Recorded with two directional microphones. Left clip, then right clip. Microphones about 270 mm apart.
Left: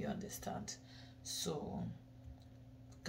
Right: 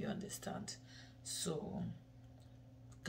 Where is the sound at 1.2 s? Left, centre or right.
Right.